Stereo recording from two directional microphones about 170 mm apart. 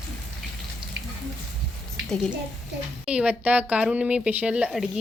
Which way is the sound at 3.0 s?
5° right (ahead or behind).